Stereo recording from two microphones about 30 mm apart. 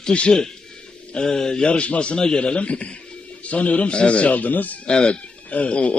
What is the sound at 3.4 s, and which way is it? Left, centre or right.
Speech, left.